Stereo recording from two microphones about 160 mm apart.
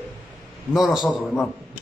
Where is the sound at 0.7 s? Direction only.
Centre (ahead or behind).